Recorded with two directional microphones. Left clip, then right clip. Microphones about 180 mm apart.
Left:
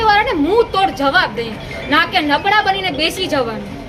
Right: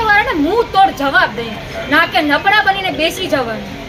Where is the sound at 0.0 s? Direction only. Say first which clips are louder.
Right 1 dB; 20° left (ahead or behind).